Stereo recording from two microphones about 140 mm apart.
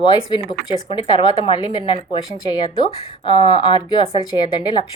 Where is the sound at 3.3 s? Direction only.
35° left (ahead or behind).